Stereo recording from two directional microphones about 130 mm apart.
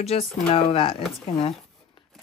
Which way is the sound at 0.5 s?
45° left (ahead or behind).